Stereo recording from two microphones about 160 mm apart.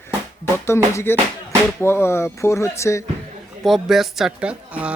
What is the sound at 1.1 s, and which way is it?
Speech, 15° left (ahead or behind).